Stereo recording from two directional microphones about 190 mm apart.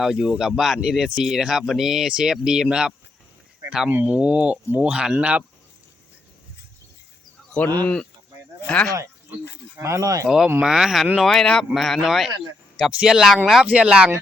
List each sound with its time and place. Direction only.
0.0 s speech: centre (ahead or behind)
8.6 s speech: 5° left (ahead or behind)
9.7 s speech: 15° right (ahead or behind)
10.2 s speech: centre (ahead or behind)